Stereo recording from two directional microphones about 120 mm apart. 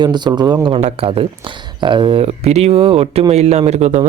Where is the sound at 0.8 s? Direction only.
50° right (ahead or behind).